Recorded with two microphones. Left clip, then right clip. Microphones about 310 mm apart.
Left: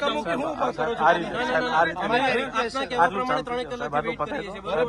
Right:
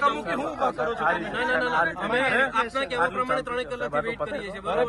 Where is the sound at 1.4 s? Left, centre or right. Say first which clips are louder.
Left 1 dB; centre.